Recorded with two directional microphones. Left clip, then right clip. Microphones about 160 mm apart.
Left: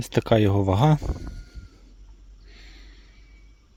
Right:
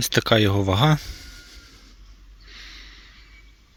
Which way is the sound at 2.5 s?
20° left (ahead or behind).